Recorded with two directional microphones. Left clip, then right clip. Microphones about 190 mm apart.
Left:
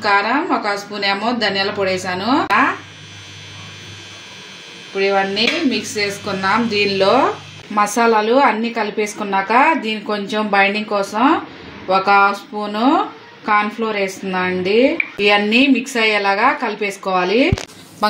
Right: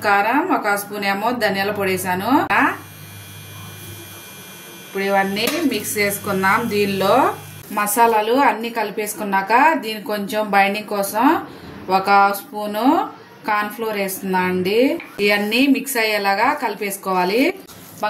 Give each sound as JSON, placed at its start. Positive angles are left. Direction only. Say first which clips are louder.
{"t": 0.0, "sound": "speech", "louder": "left 1 dB", "side_deg": 20}
{"t": 5.0, "sound": "a woman's voice", "louder": "left 3 dB", "side_deg": 30}